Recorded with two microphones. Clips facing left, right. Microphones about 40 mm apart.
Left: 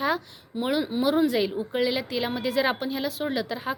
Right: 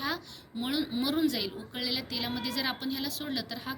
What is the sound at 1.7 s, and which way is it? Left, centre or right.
Speech, left.